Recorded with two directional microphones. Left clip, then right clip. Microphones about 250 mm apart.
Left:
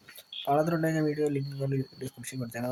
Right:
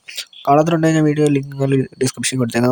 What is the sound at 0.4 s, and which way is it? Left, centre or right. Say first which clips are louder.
Speech: right 13 dB; right.